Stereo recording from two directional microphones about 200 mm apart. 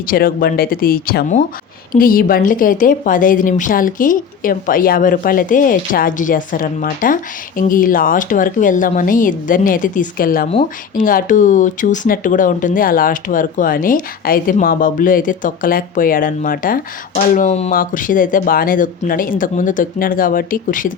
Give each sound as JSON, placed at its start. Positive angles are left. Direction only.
{"t": 0.1, "sound": "a woman's voice", "side_deg": 45}